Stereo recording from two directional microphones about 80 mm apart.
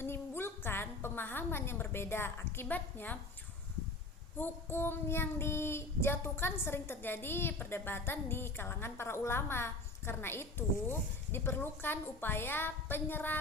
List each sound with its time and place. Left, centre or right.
0.0 s a woman's voice: left
4.4 s child singing: left